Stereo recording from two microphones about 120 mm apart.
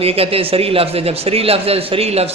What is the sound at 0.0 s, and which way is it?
A man's voice, 55° right (ahead or behind).